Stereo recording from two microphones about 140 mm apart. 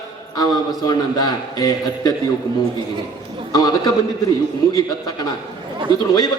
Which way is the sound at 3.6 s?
30° left (ahead or behind).